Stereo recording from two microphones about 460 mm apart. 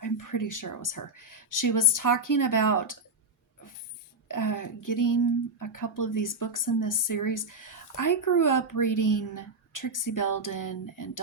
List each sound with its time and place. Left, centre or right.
0.0 s speech: left
4.3 s speech: left